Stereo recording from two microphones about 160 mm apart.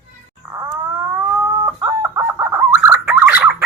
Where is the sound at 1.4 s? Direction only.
15° right (ahead or behind).